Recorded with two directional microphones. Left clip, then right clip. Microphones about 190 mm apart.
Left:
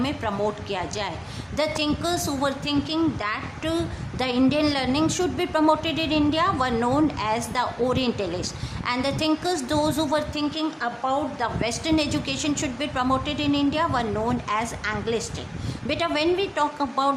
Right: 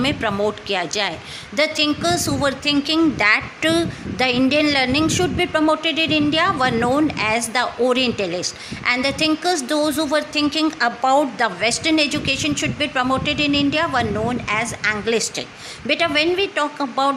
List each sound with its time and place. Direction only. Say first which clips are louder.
0.0 s a woman's voice: right 6 dB; 15° right (ahead or behind)
10.5 s a woman's voice: right 8 dB; 25° right (ahead or behind); by 17.2 s 10° right (ahead or behind)